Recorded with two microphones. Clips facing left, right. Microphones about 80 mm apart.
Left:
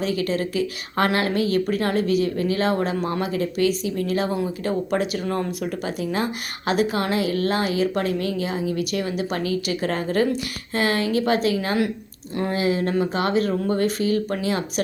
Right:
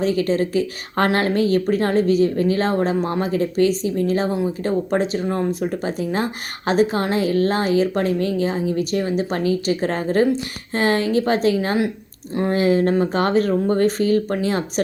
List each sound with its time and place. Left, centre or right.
0.0 s a woman's voice: right
4.3 s speech: right
4.9 s a woman's voice: right
5.6 s a woman's voice: right